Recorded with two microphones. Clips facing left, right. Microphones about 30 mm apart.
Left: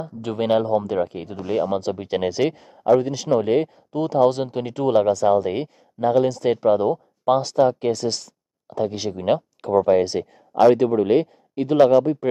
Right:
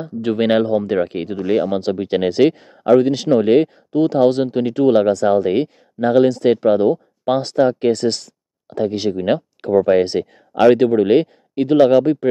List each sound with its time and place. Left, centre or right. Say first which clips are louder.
0.3 s speech: right 4 dB; right
1.0 s speech: right 6 dB; right
1.4 s speech: right 4 dB; right
2.7 s speech: right 5 dB; right
3.3 s speech: right 3 dB; right
7.9 s a sound: right 6 dB; right
8.7 s speech: right 5 dB; right
9.8 s speech: right 3 dB; right
11.9 s speech: right 3 dB; right